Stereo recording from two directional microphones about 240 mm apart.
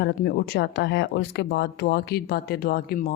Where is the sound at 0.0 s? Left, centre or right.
Left.